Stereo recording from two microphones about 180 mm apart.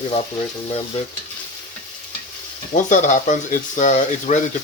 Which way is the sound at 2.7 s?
45° left (ahead or behind).